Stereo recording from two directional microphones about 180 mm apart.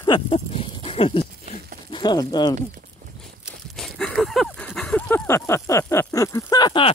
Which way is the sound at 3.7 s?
5° left (ahead or behind).